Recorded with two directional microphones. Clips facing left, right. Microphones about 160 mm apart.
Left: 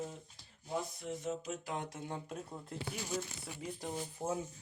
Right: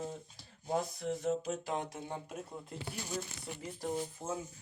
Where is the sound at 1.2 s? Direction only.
30° right (ahead or behind).